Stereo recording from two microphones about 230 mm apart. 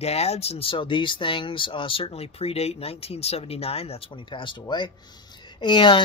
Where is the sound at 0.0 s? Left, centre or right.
Left.